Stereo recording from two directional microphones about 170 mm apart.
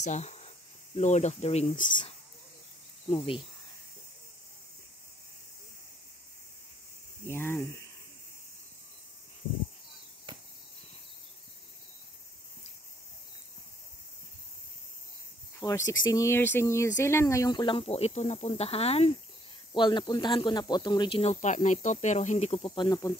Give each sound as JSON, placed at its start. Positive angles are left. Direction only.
{"t": 0.0, "sound": "a sound", "side_deg": 45}
{"t": 0.9, "sound": "speech", "side_deg": 45}
{"t": 7.2, "sound": "speech", "side_deg": 15}
{"t": 15.6, "sound": "speech", "side_deg": 20}
{"t": 21.2, "sound": "speech", "side_deg": 45}
{"t": 22.7, "sound": "speech", "side_deg": 25}